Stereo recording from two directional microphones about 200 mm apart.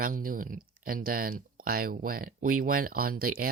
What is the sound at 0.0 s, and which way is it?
Speech, 45° right (ahead or behind).